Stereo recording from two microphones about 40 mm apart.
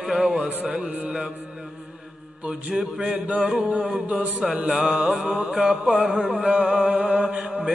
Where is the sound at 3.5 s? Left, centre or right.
Right.